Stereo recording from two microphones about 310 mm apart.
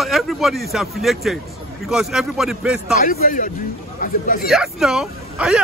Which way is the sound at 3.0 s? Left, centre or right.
Left.